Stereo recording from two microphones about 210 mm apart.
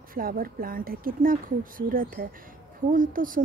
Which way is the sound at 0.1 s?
45° right (ahead or behind).